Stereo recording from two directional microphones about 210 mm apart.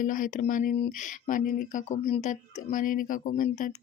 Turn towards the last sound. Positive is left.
turn(degrees=40)  # may be behind; listen again after turning